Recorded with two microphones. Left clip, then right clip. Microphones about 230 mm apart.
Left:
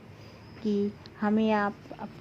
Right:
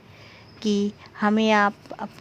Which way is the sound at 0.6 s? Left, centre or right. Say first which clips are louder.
Right 5 dB; right.